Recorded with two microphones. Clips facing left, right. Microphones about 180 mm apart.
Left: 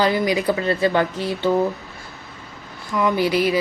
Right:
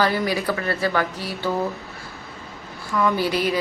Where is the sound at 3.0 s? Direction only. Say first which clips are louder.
Left 2 dB; 15° left (ahead or behind).